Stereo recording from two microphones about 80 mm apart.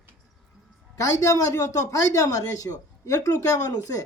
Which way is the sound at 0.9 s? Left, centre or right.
Left.